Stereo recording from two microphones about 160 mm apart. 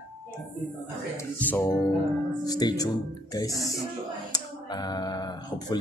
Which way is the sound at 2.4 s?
25° left (ahead or behind).